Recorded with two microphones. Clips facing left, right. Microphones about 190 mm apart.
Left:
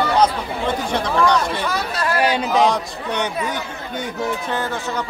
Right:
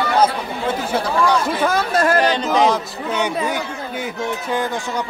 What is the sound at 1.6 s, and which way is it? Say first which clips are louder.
Speech: right 6 dB; 50° right (ahead or behind).